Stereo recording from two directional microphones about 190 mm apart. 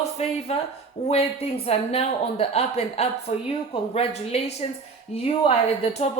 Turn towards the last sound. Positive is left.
turn(degrees=30)  # may be behind; listen again after turning